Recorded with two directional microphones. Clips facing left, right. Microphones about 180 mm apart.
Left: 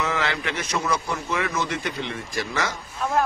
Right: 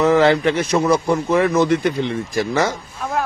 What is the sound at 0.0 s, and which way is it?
A man's voice, 40° right (ahead or behind).